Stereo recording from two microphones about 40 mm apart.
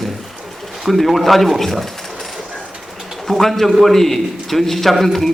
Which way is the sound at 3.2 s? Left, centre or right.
Centre.